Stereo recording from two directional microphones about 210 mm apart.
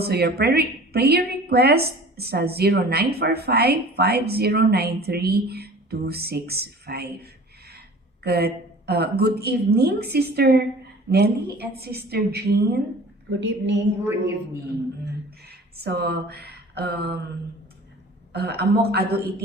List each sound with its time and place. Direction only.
0.0 s a woman's voice: 50° right (ahead or behind)
15.8 s a woman's voice: 50° right (ahead or behind)
18.3 s a woman's voice: 50° right (ahead or behind)